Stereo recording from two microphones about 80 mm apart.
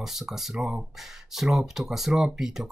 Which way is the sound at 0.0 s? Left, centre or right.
Centre.